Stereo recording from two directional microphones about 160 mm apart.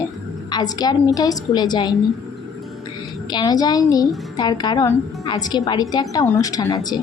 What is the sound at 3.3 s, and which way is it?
A woman's voice, 25° left (ahead or behind).